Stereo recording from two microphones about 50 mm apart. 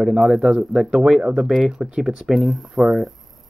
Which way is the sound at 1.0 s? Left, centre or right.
Right.